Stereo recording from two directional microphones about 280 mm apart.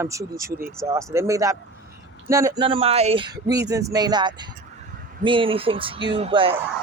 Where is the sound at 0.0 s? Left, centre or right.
Centre.